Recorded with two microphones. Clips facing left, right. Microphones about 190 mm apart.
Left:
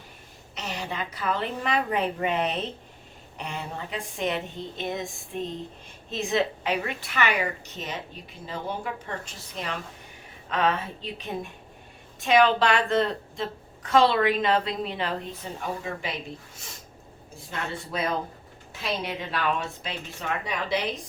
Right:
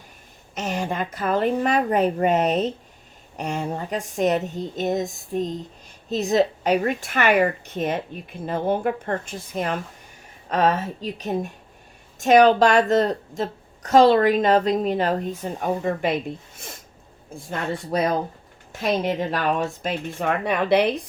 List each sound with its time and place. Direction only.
0.5 s a woman's voice: 50° right (ahead or behind)
17.5 s a woman's voice: 45° right (ahead or behind); by 21.1 s 60° right (ahead or behind)